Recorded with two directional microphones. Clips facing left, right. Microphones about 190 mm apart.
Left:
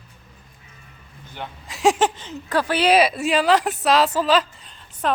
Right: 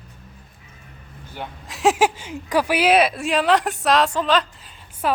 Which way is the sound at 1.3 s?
Centre (ahead or behind).